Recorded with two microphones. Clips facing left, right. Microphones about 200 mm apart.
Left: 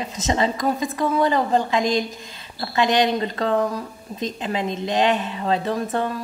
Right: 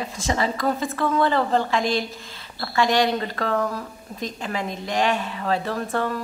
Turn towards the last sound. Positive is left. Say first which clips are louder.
# left 2 dB
turn(degrees=20)  # may be behind; listen again after turning